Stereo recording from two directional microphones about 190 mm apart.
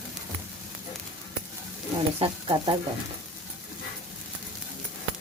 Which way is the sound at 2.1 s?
30° right (ahead or behind).